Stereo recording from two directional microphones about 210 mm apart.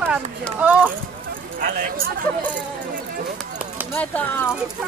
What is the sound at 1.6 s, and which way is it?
Speech, 40° right (ahead or behind).